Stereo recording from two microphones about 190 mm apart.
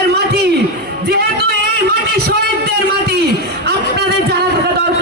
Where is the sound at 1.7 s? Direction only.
55° right (ahead or behind).